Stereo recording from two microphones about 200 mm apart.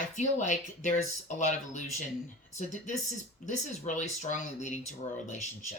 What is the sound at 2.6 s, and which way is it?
Speech, 35° left (ahead or behind).